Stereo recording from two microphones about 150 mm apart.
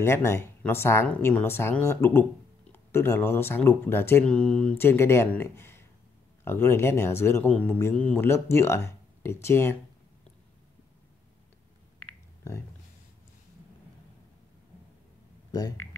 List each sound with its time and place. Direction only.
0.0 s speech: 15° left (ahead or behind)